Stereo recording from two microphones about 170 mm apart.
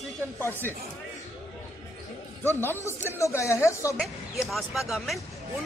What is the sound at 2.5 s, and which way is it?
Speech, 15° left (ahead or behind).